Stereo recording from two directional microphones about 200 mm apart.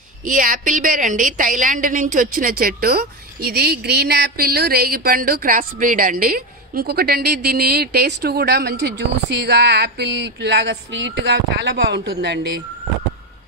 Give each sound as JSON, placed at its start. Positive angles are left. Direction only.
{"t": 0.2, "sound": "a woman's voice", "side_deg": -40}